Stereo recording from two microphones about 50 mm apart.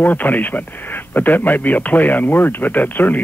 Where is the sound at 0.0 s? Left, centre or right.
Left.